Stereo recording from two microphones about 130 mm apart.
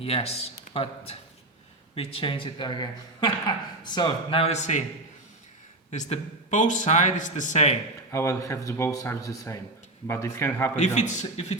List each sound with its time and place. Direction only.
0.0 s a man's voice: 50° left (ahead or behind); by 4.4 s 35° left (ahead or behind)
4.4 s a man's voice: 60° left (ahead or behind)
5.9 s speech: 65° left (ahead or behind)
8.1 s speech: 25° left (ahead or behind)
10.8 s a man's voice: 65° left (ahead or behind)